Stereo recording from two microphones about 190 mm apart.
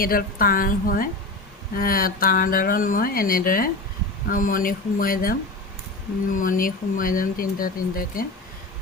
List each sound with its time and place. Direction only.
0.0 s speech: 50° left (ahead or behind)